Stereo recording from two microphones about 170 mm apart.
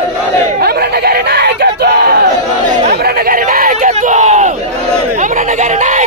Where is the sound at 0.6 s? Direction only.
70° right (ahead or behind).